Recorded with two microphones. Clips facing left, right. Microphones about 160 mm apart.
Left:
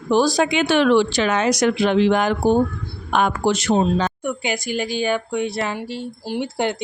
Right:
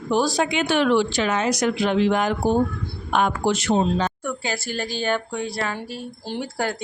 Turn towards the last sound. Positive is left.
turn(degrees=10)  # may be behind; listen again after turning